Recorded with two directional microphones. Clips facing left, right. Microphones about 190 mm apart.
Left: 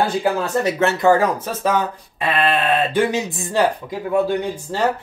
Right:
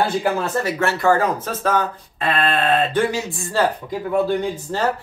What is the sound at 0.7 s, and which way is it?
Speech, 20° left (ahead or behind).